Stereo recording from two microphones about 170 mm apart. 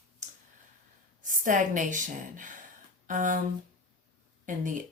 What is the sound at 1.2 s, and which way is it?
A woman's voice, 50° right (ahead or behind).